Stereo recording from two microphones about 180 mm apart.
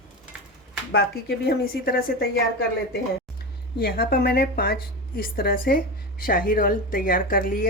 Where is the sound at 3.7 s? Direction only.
55° left (ahead or behind).